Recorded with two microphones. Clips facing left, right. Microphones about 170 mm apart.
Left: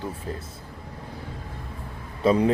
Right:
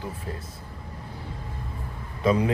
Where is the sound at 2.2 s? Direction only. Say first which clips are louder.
Left 3 dB; 30° left (ahead or behind).